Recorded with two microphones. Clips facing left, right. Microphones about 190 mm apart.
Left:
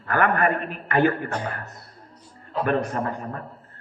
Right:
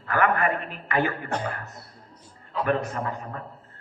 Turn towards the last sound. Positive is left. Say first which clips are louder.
# left 3 dB
turn(degrees=45)  # may be behind; listen again after turning